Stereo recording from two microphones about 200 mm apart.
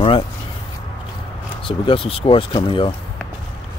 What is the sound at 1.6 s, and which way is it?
Speech, 25° left (ahead or behind).